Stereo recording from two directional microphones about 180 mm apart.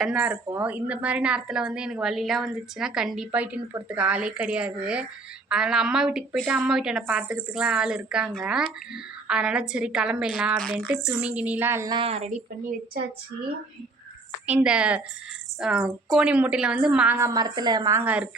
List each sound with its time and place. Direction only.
0.0 s a woman's voice: 5° right (ahead or behind)
11.9 s a woman's voice: 35° right (ahead or behind)
14.4 s a woman's voice: 5° right (ahead or behind)